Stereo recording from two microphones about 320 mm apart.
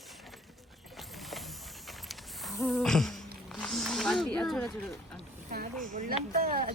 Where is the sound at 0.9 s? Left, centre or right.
Centre.